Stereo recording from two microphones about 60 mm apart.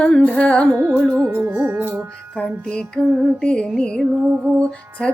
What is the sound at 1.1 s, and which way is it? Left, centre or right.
Music, right.